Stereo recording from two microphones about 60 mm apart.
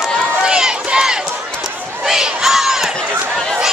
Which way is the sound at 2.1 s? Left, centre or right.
Centre.